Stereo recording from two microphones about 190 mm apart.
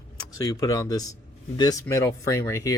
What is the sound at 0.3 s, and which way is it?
A man's voice, 20° left (ahead or behind).